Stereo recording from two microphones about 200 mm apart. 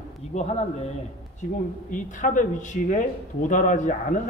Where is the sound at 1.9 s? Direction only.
40° left (ahead or behind).